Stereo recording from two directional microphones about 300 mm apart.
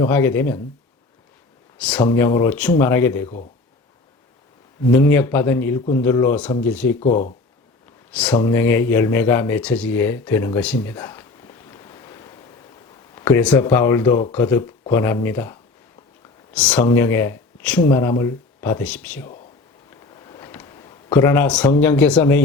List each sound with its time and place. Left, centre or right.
0.0 s speech: centre
1.8 s speech: centre
4.9 s speech: centre
7.0 s speech: left
8.1 s speech: centre
20.1 s a sound: centre
21.2 s speech: centre